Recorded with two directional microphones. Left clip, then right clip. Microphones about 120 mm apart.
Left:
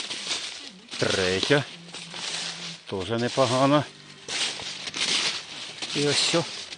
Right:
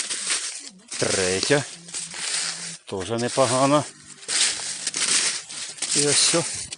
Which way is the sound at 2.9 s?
15° right (ahead or behind).